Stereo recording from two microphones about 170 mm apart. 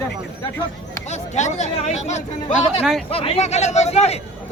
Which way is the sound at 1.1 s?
40° left (ahead or behind).